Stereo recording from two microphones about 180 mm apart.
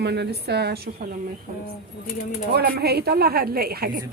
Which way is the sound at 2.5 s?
60° right (ahead or behind).